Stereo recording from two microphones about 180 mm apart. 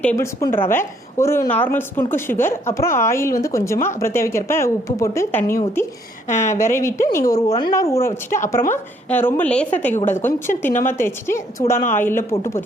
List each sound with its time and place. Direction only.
0.0 s a woman's voice: 10° left (ahead or behind)
6.3 s speech: 40° left (ahead or behind)
6.6 s a woman's voice: 15° left (ahead or behind)